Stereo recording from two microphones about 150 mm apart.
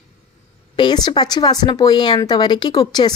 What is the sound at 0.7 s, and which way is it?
Speech, 30° left (ahead or behind).